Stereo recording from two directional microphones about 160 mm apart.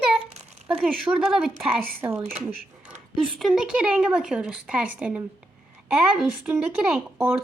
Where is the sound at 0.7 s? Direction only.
5° right (ahead or behind).